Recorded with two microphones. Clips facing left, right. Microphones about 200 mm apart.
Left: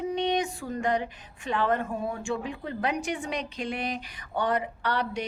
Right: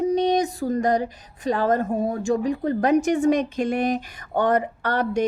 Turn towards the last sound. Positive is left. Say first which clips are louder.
# right 7 dB
turn(degrees=-45)  # may be behind; listen again after turning